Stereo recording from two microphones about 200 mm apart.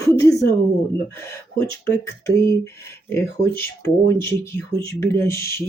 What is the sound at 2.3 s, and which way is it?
Speech, 15° left (ahead or behind).